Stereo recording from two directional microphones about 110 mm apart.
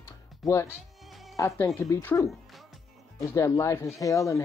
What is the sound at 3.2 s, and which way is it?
Speech, 25° left (ahead or behind).